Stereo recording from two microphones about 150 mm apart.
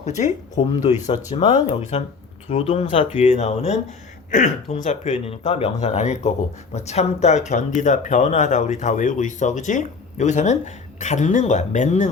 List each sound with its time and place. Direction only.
0.0 s speech: 50° left (ahead or behind)